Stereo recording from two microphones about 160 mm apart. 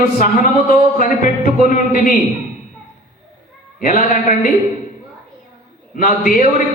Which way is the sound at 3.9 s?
55° left (ahead or behind).